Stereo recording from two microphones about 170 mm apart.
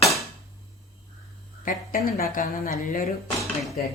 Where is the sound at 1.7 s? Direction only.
55° left (ahead or behind).